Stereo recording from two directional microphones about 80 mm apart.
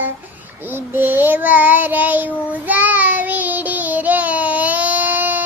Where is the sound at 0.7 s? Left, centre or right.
Right.